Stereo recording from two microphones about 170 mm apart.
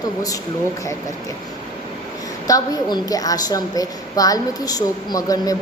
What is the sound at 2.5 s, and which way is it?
A woman's voice, 20° left (ahead or behind).